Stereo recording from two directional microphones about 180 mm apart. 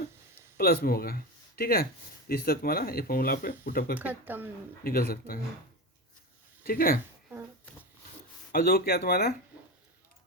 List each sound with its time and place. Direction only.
0.5 s speech: 60° left (ahead or behind)
3.9 s speech: 10° right (ahead or behind)
4.8 s speech: 55° left (ahead or behind)
6.7 s speech: 55° left (ahead or behind)
8.5 s speech: 55° left (ahead or behind)